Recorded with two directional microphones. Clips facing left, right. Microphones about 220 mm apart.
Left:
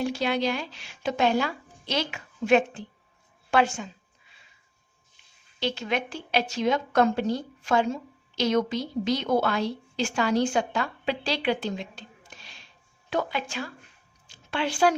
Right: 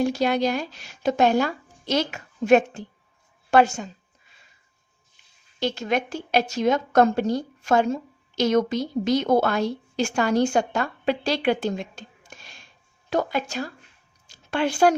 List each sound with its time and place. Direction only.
0.0 s speech: 45° right (ahead or behind)
5.5 s a woman's voice: 45° right (ahead or behind)
14.3 s a sound: 45° right (ahead or behind)